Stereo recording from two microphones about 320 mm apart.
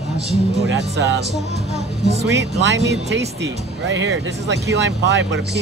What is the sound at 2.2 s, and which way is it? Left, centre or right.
Speech, right.